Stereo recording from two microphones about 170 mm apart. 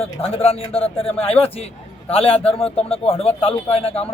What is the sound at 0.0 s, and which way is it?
A man's voice, 35° left (ahead or behind).